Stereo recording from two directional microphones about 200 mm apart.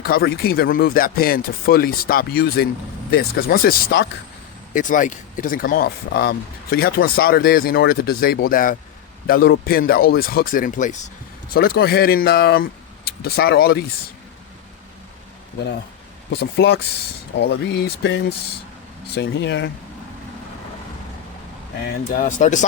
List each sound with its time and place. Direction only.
0.0 s speech: 50° left (ahead or behind)
16.3 s speech: 55° left (ahead or behind)
22.1 s speech: 40° left (ahead or behind)